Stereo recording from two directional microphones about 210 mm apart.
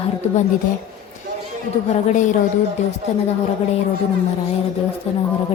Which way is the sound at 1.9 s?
35° left (ahead or behind).